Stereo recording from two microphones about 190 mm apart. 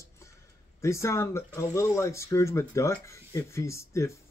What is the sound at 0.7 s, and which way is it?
Speech, 15° left (ahead or behind).